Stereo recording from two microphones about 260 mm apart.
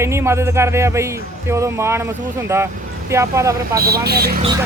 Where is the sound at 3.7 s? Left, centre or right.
Right.